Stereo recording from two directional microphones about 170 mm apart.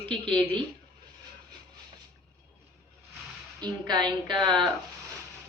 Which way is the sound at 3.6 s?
25° right (ahead or behind).